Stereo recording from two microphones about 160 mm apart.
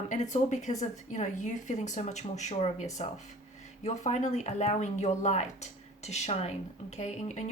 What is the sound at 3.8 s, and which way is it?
Speech, 45° left (ahead or behind).